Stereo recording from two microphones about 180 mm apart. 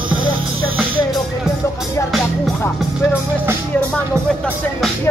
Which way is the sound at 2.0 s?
Centre (ahead or behind).